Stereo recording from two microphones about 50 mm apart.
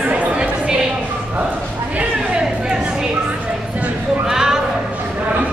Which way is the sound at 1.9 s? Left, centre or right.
Centre.